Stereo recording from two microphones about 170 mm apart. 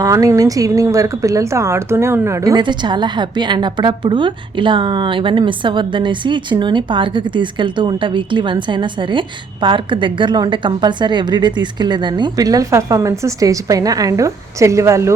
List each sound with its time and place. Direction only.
0.0 s a woman's voice: 20° right (ahead or behind)